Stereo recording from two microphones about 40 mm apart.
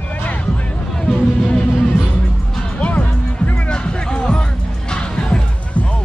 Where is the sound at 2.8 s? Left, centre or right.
Left.